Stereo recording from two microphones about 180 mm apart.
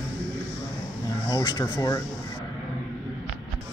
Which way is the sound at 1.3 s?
20° left (ahead or behind).